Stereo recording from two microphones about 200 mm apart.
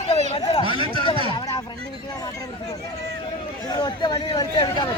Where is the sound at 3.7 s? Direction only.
20° left (ahead or behind).